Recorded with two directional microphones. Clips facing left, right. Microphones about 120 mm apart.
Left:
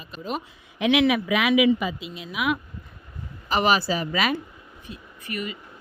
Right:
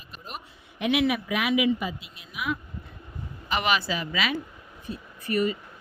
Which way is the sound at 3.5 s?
35° left (ahead or behind).